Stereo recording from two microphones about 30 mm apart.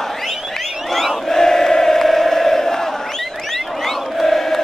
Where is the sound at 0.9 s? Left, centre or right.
Centre.